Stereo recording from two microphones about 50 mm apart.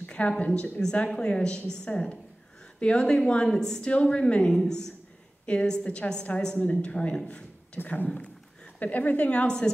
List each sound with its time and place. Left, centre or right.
0.1 s a woman's voice: left
3.9 s a woman's voice: left
7.2 s a sound: left
7.8 s speech: left